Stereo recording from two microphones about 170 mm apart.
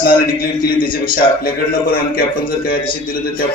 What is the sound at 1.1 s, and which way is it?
Speech, 60° left (ahead or behind).